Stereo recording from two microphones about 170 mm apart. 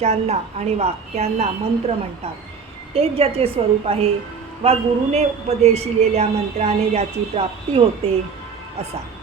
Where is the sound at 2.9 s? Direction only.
35° right (ahead or behind).